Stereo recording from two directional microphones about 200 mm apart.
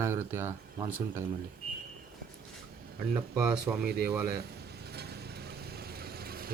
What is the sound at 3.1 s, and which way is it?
Speech, 5° right (ahead or behind).